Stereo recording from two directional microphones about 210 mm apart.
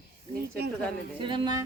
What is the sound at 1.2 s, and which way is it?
Speech, 20° right (ahead or behind).